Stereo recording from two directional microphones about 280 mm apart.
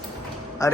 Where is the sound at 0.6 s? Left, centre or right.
Centre.